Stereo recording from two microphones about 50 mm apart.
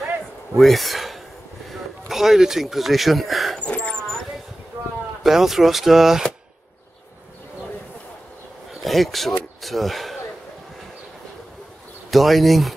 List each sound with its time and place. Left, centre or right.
0.6 s a man's voice: centre
3.6 s a sound: left
4.7 s a sound: right
5.2 s speech: centre
8.8 s speech: centre
12.1 s speech: centre